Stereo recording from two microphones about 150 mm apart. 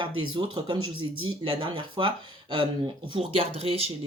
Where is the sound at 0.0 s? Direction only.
30° right (ahead or behind).